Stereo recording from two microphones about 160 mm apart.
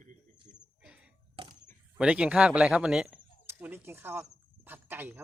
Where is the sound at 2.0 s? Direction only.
5° right (ahead or behind).